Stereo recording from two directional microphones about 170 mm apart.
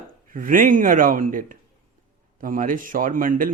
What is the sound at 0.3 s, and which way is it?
Speech, 55° right (ahead or behind).